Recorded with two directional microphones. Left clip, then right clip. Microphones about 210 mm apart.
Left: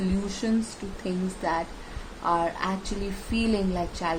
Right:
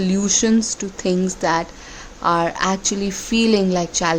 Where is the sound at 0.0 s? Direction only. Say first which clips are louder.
Right 11 dB; 50° right (ahead or behind).